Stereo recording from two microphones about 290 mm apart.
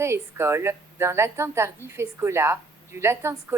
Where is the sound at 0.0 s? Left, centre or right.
Centre.